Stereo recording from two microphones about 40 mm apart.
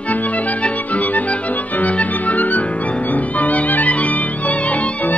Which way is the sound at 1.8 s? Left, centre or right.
Left.